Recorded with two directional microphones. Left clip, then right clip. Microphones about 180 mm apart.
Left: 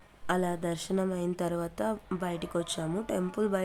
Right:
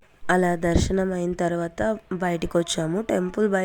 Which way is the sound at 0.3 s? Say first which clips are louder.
Right 9 dB; 30° right (ahead or behind).